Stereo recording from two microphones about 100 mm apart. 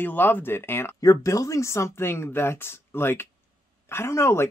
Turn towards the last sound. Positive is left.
turn(degrees=25)  # may be behind; listen again after turning